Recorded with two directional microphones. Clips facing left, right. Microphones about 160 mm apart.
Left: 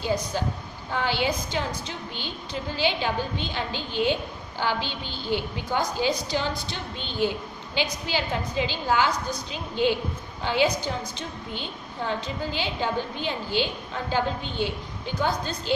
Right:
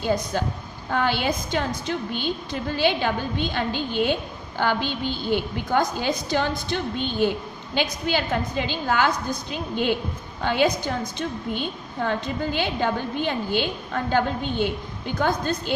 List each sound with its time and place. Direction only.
0.9 s a woman's voice: 55° right (ahead or behind)